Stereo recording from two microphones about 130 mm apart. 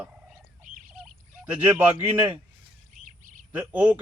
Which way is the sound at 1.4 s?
15° right (ahead or behind).